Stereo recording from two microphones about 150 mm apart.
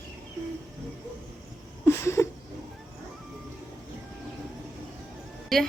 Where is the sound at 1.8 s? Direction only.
20° left (ahead or behind).